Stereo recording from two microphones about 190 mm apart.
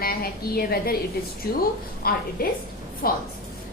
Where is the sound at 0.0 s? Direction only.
50° left (ahead or behind).